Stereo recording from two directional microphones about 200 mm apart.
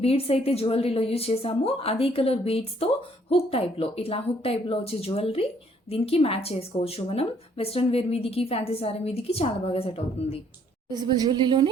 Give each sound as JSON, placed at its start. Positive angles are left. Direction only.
{"t": 0.0, "sound": "a woman's voice", "side_deg": 30}
{"t": 10.8, "sound": "a woman's voice", "side_deg": -20}